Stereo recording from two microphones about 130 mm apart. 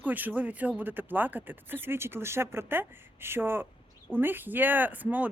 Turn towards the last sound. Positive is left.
turn(degrees=-10)  # may be behind; listen again after turning